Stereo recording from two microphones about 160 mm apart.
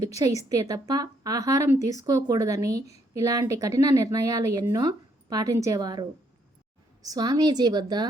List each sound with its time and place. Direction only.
0.4 s a woman's voice: 20° right (ahead or behind)